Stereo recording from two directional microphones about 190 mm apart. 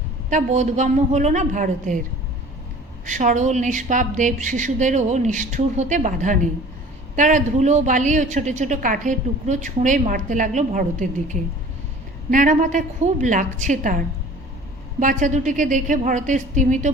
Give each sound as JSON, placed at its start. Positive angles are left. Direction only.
{"t": 0.3, "sound": "speech", "side_deg": -40}
{"t": 3.1, "sound": "speech", "side_deg": -40}